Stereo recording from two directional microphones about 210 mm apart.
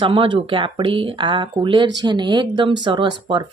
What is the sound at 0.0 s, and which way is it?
Speech, 25° right (ahead or behind).